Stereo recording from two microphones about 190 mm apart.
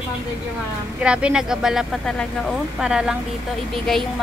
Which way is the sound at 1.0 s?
5° right (ahead or behind).